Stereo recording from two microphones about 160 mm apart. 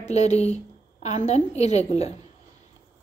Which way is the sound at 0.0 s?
45° left (ahead or behind).